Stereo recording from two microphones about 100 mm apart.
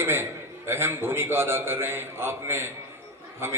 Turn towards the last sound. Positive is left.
turn(degrees=-25)  # may be behind; listen again after turning